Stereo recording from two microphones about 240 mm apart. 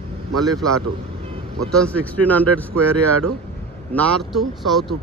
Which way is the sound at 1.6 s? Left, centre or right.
Centre.